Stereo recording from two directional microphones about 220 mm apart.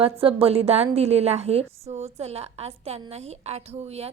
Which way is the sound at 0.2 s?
25° right (ahead or behind).